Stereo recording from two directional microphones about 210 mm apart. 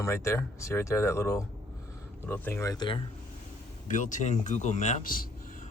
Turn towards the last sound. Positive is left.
turn(degrees=40)  # may be behind; listen again after turning